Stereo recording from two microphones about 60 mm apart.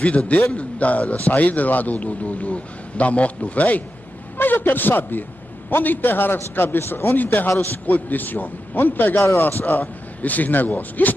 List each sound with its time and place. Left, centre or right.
0.0 s a man's voice: left